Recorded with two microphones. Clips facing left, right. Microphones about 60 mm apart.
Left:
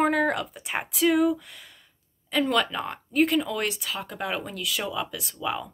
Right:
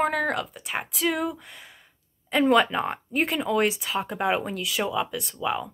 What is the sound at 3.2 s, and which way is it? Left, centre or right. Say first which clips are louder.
Speech: left 1 dB; centre.